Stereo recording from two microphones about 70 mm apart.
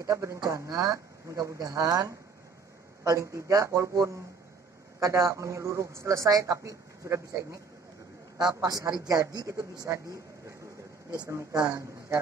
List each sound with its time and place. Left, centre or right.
0.0 s speech: right
3.0 s speech: right
8.4 s speech: right
11.1 s speech: right